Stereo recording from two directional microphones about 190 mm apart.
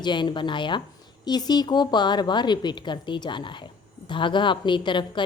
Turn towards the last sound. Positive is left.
turn(degrees=25)  # may be behind; listen again after turning